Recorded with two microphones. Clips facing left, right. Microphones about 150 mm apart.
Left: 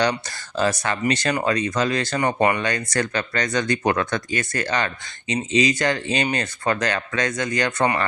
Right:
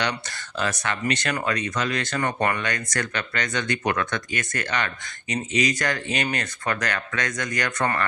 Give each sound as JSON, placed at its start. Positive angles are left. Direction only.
{"t": 0.0, "sound": "speech", "side_deg": 35}
{"t": 2.1, "sound": "speech", "side_deg": 20}
{"t": 2.6, "sound": "speech", "side_deg": 30}